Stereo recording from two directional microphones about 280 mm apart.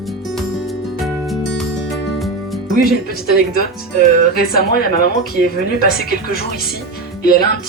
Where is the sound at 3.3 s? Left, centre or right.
Left.